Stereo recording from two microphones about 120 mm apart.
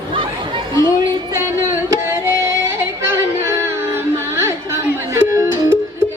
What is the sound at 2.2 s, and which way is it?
Yodeling, 25° right (ahead or behind).